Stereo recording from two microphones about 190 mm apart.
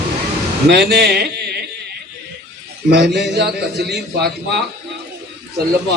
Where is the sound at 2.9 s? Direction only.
60° right (ahead or behind).